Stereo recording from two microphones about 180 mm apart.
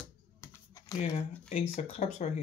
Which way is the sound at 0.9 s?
40° left (ahead or behind).